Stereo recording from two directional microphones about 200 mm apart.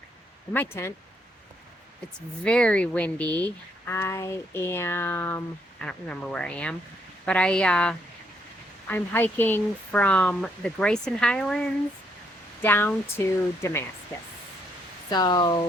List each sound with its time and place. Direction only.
0.5 s speech: 10° left (ahead or behind)
2.1 s speech: 5° left (ahead or behind)
12.6 s speech: 10° left (ahead or behind)
15.1 s speech: 20° left (ahead or behind)